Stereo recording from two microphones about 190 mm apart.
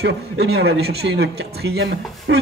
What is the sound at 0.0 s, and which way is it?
Speech, 60° right (ahead or behind).